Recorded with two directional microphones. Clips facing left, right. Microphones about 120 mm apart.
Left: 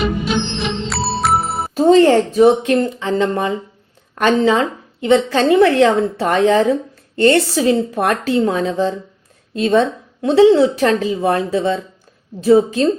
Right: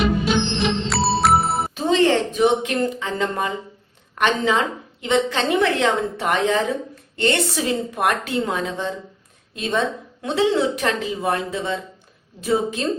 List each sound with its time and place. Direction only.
0.0 s music: centre (ahead or behind)
1.7 s a woman's voice: 40° left (ahead or behind)